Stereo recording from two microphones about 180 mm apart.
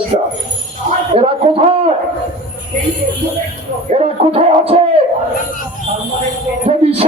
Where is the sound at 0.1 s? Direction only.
30° right (ahead or behind).